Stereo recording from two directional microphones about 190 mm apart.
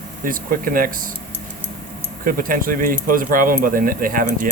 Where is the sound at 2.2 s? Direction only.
50° right (ahead or behind).